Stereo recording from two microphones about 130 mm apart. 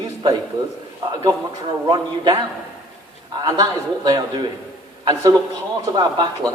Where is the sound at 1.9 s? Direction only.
35° right (ahead or behind).